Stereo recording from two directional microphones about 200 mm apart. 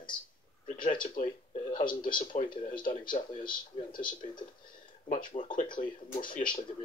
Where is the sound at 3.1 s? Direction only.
45° left (ahead or behind).